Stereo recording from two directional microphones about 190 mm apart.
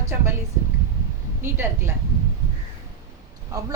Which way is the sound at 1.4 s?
10° right (ahead or behind).